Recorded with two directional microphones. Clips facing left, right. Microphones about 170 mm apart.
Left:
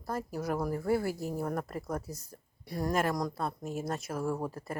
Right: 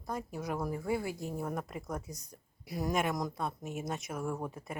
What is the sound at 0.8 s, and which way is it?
Speech, 15° right (ahead or behind).